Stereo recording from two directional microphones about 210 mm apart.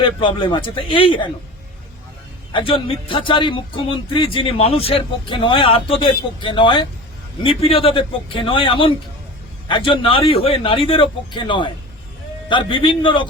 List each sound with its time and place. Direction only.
0.0 s speech: 25° left (ahead or behind)
2.5 s speech: 25° left (ahead or behind)